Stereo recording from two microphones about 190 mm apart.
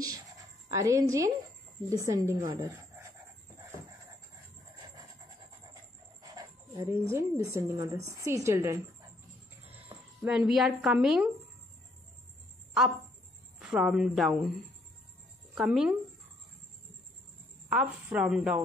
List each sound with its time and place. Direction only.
0.7 s speech: 15° right (ahead or behind)
6.3 s speech: 15° right (ahead or behind)
10.2 s a woman's voice: 5° right (ahead or behind)
13.6 s speech: 5° right (ahead or behind)
15.5 s a woman's voice: 5° right (ahead or behind)
17.6 s a woman's voice: 5° right (ahead or behind)